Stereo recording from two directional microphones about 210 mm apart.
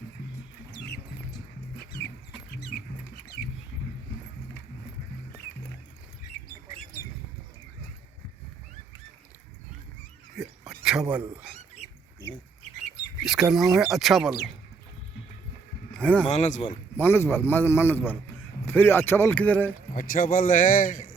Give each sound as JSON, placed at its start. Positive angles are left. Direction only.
{"t": 10.7, "sound": "a sound", "side_deg": -5}
{"t": 13.2, "sound": "speech", "side_deg": 0}
{"t": 15.9, "sound": "a sound", "side_deg": 5}
{"t": 16.2, "sound": "a man's voice", "side_deg": 35}
{"t": 17.0, "sound": "a man's voice", "side_deg": 10}
{"t": 19.9, "sound": "a man's voice", "side_deg": 40}